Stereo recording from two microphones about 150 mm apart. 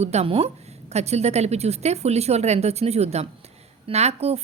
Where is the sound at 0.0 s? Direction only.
45° right (ahead or behind).